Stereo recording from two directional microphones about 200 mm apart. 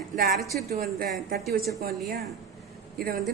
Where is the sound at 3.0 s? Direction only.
50° right (ahead or behind).